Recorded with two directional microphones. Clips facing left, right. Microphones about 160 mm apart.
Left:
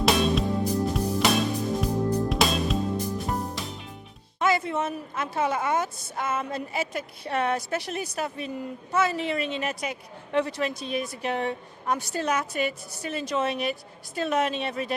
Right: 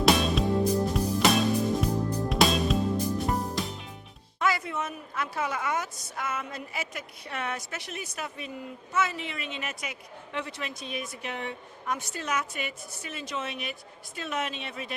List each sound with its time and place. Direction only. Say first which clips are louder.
0.0 s music: left 1 dB; centre (ahead or behind)
4.4 s a woman's voice: left 4 dB; 25° left (ahead or behind)